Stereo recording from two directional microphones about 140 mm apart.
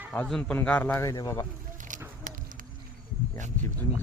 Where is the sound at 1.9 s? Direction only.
65° right (ahead or behind).